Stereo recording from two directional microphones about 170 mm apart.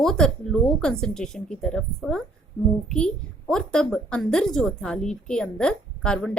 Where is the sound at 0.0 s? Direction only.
5° left (ahead or behind).